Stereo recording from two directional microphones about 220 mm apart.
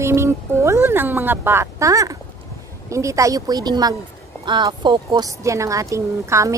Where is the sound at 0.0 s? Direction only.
10° right (ahead or behind).